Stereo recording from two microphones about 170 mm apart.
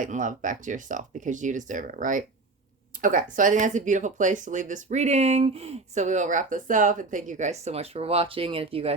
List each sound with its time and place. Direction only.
0.0 s speech: 50° right (ahead or behind)